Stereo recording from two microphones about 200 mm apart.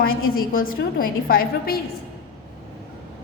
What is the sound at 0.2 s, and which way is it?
A woman's voice, 45° left (ahead or behind).